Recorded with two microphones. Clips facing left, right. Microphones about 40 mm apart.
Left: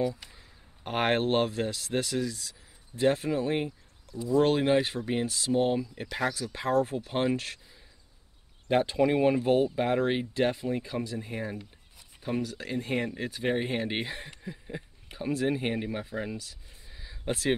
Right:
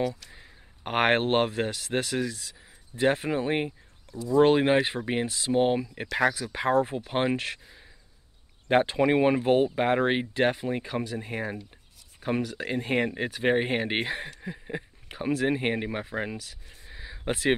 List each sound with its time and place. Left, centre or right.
0.4 s speech: right